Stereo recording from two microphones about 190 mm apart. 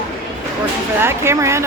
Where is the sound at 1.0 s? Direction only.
15° right (ahead or behind).